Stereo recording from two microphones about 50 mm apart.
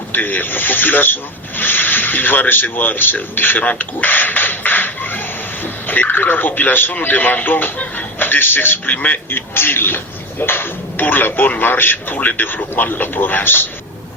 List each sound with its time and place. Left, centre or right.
0.1 s a man's voice: left